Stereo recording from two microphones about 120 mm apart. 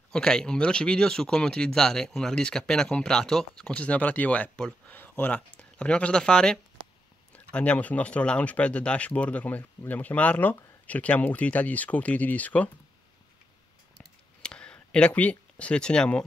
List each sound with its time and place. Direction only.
0.1 s speech: 5° left (ahead or behind)
14.4 s speech: 5° left (ahead or behind)